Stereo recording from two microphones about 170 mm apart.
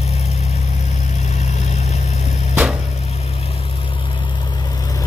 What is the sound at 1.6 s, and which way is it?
Vehicle, 40° left (ahead or behind).